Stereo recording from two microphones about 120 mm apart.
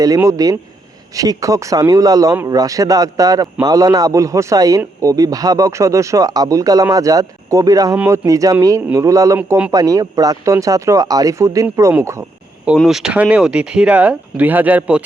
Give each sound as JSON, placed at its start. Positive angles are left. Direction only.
{"t": 0.2, "sound": "speech", "side_deg": -30}
{"t": 12.6, "sound": "speech", "side_deg": -5}